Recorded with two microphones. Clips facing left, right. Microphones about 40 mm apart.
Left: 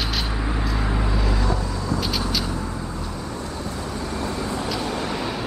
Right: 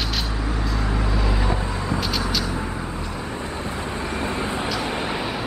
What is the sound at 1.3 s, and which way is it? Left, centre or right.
Vehicle, right.